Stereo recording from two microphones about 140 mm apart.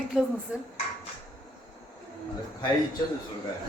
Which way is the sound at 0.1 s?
5° right (ahead or behind).